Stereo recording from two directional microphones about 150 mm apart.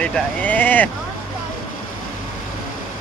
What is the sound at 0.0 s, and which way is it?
Speech, 10° left (ahead or behind).